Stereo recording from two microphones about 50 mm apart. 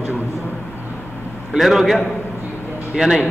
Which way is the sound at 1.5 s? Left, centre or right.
Centre.